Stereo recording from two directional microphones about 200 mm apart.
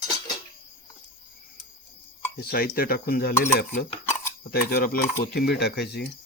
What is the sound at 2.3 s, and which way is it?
Speech, 50° left (ahead or behind).